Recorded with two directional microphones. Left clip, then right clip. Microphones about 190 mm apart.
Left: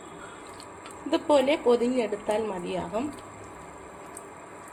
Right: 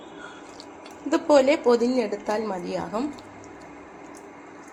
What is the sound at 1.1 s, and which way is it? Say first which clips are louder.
A woman's voice: right 4 dB; 15° right (ahead or behind).